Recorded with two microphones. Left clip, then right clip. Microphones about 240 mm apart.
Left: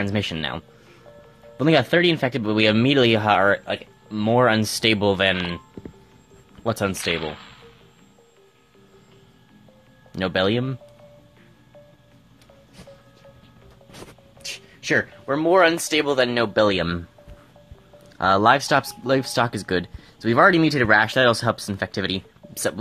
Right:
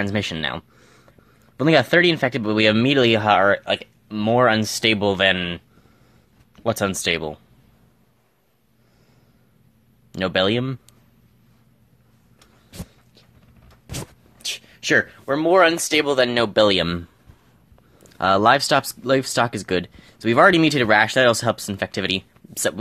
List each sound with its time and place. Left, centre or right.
0.0 s speech: centre
6.6 s speech: centre
10.1 s speech: centre
14.4 s speech: centre
18.1 s speech: centre